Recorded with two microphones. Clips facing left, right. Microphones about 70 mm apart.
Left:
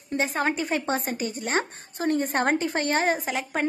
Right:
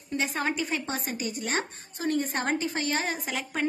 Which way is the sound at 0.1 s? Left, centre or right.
Left.